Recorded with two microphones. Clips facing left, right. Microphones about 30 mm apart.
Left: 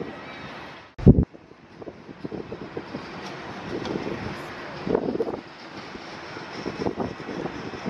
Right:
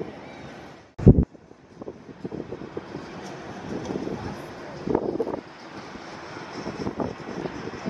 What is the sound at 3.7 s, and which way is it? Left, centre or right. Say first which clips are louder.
Vehicle: left 1 dB; left.